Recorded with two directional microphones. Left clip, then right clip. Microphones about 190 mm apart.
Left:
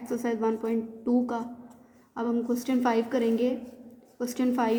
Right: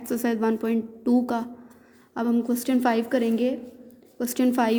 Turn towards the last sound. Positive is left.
turn(degrees=-40)  # may be behind; listen again after turning